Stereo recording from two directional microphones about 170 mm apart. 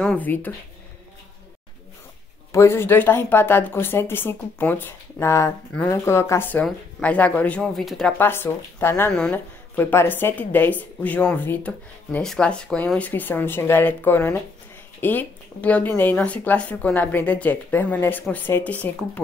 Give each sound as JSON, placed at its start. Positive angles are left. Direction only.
{"t": 0.0, "sound": "speech", "side_deg": 10}
{"t": 2.5, "sound": "speech", "side_deg": 15}
{"t": 8.2, "sound": "speech", "side_deg": 15}